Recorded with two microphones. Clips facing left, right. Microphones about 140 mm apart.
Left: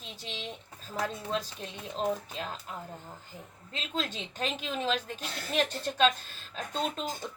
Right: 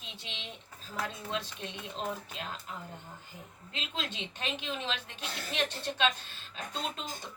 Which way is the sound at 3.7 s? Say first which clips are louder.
Left 4 dB; 40° left (ahead or behind).